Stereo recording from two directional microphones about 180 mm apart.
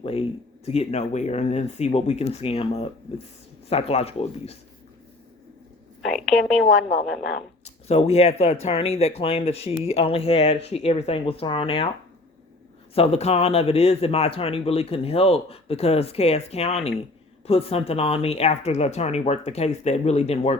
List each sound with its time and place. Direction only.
0.0 s speech: 30° left (ahead or behind)
6.0 s a woman's voice: centre (ahead or behind)
7.6 s speech: 35° left (ahead or behind)
12.9 s speech: 35° left (ahead or behind)